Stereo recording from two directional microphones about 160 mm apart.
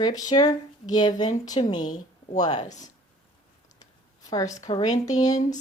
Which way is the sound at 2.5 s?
45° left (ahead or behind).